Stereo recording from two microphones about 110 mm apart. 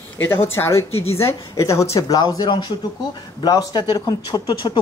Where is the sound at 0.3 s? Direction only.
20° left (ahead or behind).